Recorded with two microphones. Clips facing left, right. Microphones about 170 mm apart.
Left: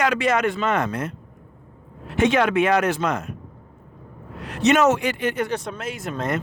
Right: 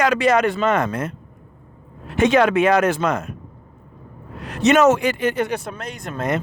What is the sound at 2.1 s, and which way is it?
Speech, 40° right (ahead or behind).